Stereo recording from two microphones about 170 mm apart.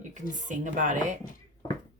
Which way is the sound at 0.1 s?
50° right (ahead or behind).